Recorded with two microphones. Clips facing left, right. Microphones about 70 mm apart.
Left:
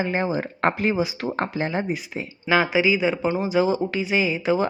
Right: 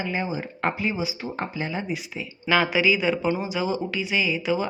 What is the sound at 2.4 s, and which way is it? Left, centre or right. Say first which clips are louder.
A man's voice: left 1 dB; left.